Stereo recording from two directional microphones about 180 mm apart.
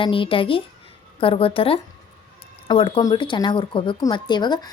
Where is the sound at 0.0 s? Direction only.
30° left (ahead or behind).